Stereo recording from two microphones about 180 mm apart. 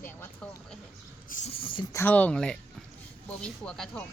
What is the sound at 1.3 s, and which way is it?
Speech, 35° left (ahead or behind).